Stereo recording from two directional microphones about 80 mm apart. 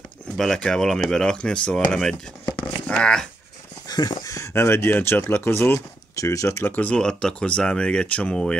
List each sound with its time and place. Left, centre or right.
0.4 s speech: centre
3.8 s a sound: left
4.2 s speech: left
6.1 s speech: left
6.7 s speech: left
7.0 s speech: centre